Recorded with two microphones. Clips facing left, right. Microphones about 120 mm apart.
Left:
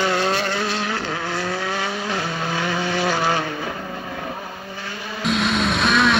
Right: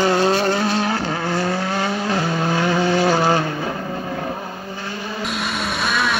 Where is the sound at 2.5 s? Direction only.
40° right (ahead or behind).